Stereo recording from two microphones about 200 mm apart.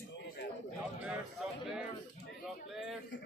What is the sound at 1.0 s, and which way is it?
A man's voice, 5° right (ahead or behind).